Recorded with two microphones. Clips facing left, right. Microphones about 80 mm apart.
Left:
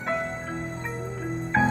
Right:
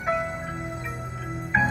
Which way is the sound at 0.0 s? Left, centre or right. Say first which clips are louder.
Right 2 dB; centre.